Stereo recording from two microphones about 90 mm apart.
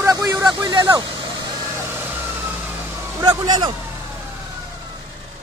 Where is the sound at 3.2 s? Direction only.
50° right (ahead or behind).